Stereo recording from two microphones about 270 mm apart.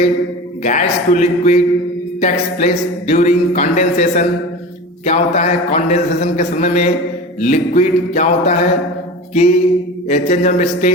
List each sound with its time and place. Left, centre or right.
0.6 s speech: left